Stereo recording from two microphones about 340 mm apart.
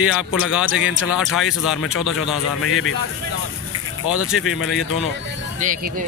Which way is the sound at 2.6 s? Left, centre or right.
Left.